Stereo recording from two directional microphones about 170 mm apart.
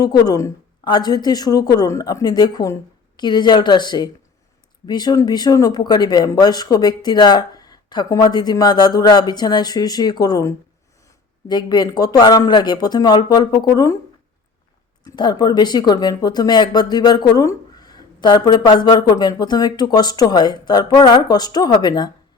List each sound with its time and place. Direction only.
0.0 s speech: 25° left (ahead or behind)
15.0 s speech: 25° left (ahead or behind)